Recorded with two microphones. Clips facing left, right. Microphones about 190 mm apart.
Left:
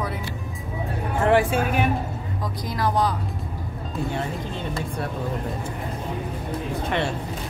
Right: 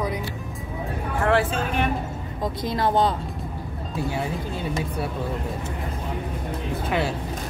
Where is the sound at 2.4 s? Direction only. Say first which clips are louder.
Right 3 dB; 25° right (ahead or behind).